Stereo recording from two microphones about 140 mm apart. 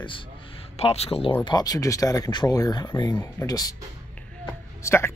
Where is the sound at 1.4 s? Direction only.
30° left (ahead or behind).